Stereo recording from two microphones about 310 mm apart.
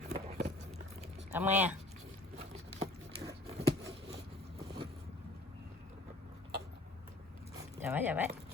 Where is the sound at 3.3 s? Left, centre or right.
Centre.